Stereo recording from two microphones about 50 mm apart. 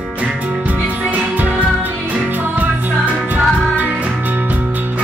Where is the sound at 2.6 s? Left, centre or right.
Right.